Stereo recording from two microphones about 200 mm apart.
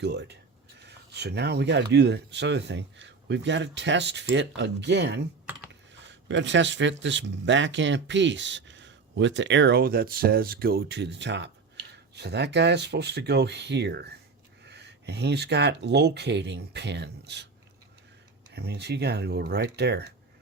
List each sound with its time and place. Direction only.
0.0 s speech: 60° right (ahead or behind)
18.5 s speech: 55° right (ahead or behind)